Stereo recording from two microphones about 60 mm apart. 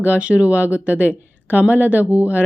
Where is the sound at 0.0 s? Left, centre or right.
Right.